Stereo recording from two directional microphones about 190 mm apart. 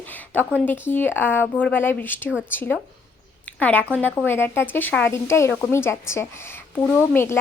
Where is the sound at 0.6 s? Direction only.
10° left (ahead or behind).